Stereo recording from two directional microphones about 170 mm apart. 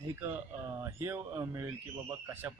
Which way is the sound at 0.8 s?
15° right (ahead or behind).